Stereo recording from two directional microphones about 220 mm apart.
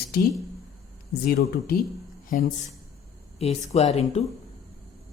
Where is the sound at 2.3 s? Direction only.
35° left (ahead or behind).